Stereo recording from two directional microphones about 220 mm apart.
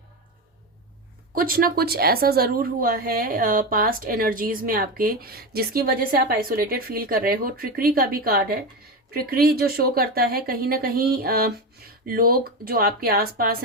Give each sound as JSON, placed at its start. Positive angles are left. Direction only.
{"t": 1.4, "sound": "a woman's voice", "side_deg": -40}